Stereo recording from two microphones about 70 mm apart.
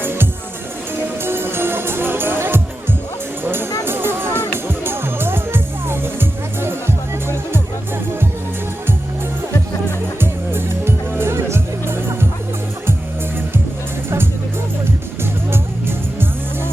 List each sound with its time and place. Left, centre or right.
0.0 s music: right
10.2 s music: right